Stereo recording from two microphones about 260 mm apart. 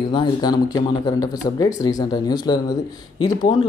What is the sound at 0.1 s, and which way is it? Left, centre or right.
Speech, centre.